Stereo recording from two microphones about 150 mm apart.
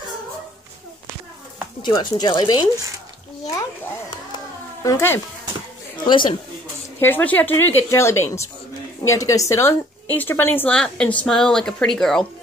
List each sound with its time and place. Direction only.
1.8 s speech: 30° left (ahead or behind)
4.8 s a woman's voice: 15° left (ahead or behind)
6.0 s speech: 30° left (ahead or behind)
7.0 s a woman's voice: 15° left (ahead or behind)